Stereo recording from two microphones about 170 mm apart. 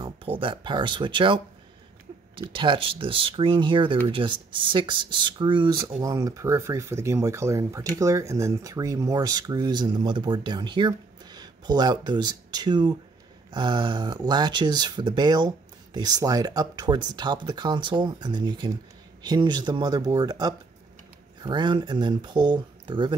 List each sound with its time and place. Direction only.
0.4 s speech: 30° right (ahead or behind)
2.4 s speech: 30° right (ahead or behind)